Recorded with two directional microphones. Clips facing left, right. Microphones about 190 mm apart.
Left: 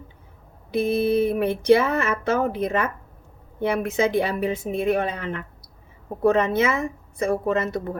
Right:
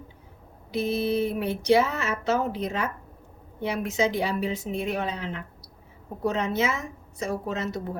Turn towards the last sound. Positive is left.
turn(degrees=55)  # may be behind; listen again after turning